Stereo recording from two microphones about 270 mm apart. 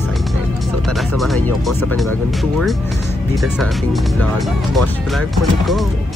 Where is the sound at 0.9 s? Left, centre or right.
Centre.